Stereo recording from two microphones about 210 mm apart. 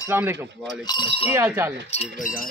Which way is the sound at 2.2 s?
40° left (ahead or behind).